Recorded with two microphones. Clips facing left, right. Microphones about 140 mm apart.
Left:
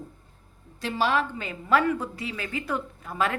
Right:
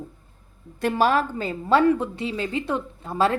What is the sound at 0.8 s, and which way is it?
A woman's voice, 50° right (ahead or behind).